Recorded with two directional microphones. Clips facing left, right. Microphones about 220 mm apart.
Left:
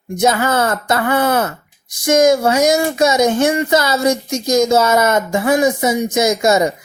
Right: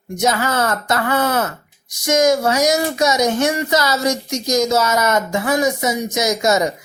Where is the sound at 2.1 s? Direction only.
25° left (ahead or behind).